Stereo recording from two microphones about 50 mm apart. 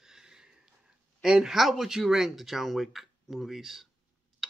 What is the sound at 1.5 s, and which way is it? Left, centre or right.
Speech, centre.